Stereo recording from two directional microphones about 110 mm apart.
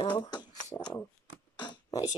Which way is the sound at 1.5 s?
40° left (ahead or behind).